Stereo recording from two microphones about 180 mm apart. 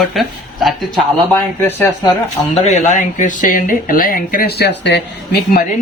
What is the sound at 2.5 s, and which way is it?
Speech, 40° left (ahead or behind).